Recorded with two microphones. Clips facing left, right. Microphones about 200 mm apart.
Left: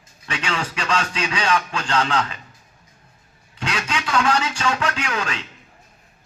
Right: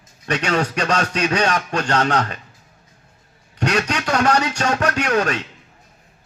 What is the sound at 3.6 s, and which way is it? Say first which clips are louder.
Speech: right 6 dB; 45° right (ahead or behind).